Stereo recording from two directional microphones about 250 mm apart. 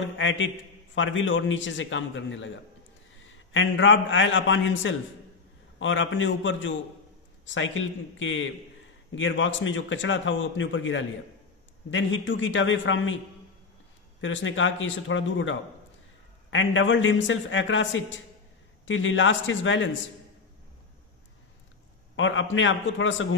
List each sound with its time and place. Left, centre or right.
0.2 s a man's voice: left
3.5 s a man's voice: left
14.2 s a man's voice: left
22.1 s a man's voice: left